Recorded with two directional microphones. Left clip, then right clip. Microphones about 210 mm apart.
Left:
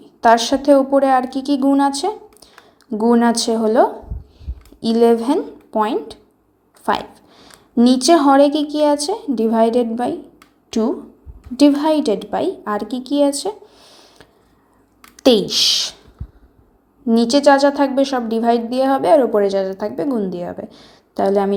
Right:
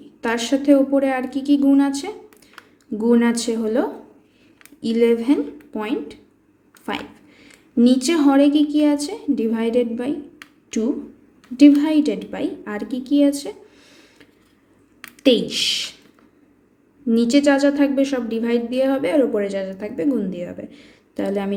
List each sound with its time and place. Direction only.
0.2 s a woman's voice: 25° left (ahead or behind)
4.9 s a woman's voice: 25° left (ahead or behind)
11.5 s a woman's voice: 25° left (ahead or behind)
17.1 s a woman's voice: 25° left (ahead or behind)